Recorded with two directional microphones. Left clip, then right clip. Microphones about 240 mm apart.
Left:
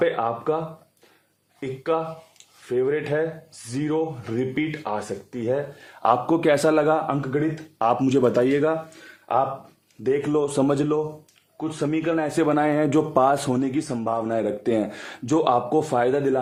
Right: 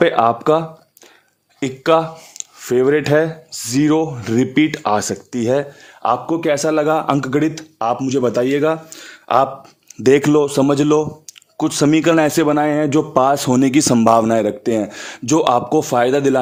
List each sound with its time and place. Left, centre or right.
0.0 s speech: right
6.0 s a man's voice: centre
7.1 s speech: right
7.8 s speech: centre
9.2 s speech: right
10.3 s speech: right
11.5 s speech: right
12.4 s speech: right
13.6 s speech: right